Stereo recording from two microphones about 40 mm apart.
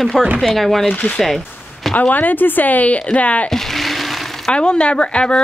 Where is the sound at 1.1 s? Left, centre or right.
Centre.